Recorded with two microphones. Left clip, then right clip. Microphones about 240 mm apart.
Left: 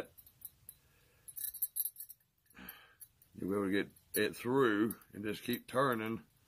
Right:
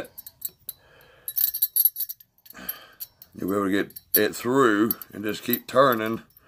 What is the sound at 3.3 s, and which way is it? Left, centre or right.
Speech, left.